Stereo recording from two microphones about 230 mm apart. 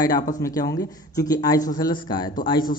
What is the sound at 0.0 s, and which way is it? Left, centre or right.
Speech, centre.